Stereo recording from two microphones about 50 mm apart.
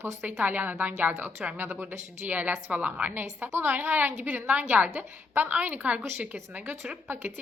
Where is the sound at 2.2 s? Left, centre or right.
Right.